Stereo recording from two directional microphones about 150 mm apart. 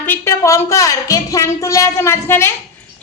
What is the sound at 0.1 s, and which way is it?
A woman's voice, 20° left (ahead or behind).